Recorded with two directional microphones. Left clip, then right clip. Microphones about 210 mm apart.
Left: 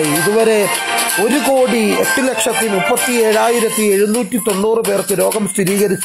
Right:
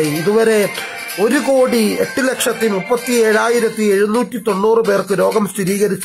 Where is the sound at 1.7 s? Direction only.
20° left (ahead or behind).